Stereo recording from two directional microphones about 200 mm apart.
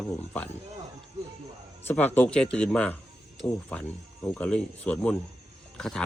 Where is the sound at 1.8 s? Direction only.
10° left (ahead or behind).